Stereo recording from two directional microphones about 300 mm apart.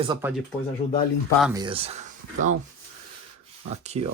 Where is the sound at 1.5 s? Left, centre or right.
Centre.